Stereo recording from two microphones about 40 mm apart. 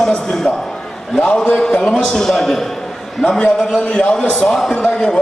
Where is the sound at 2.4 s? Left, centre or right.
Centre.